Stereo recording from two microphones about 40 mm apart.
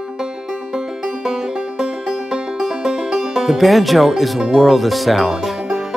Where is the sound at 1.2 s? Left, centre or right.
Centre.